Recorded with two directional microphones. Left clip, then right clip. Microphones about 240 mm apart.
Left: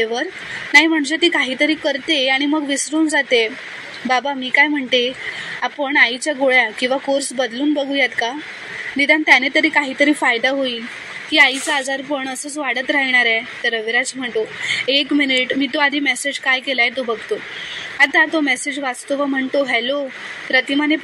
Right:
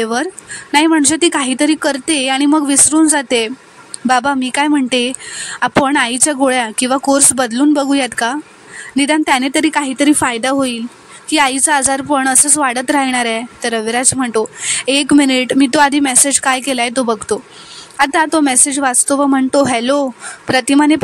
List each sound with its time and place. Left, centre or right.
0.7 s a woman's voice: right